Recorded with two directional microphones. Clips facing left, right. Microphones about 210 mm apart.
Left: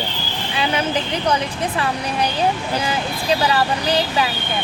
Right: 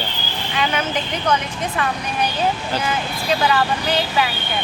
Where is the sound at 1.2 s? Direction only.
35° left (ahead or behind).